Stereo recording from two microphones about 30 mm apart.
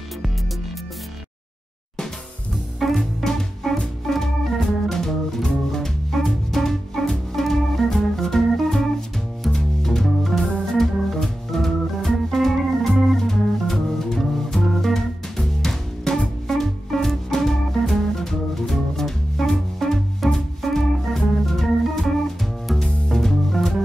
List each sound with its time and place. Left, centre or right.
2.5 s music: centre
4.1 s organ: centre
5.7 s music: centre
10.0 s music: centre
10.7 s organ: centre
12.5 s organ: centre
14.1 s music: centre
16.0 s music: centre
16.5 s music: centre
21.5 s organ: centre
23.0 s music: centre